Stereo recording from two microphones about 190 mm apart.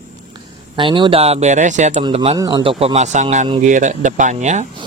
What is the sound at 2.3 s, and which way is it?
Speech, 20° right (ahead or behind).